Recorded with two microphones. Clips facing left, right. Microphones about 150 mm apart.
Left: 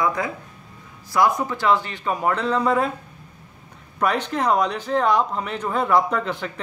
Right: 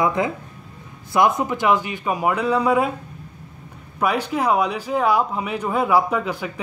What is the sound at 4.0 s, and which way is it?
Speech, 5° right (ahead or behind).